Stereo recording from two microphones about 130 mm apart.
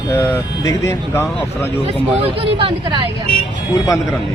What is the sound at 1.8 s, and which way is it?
Speech, 45° right (ahead or behind).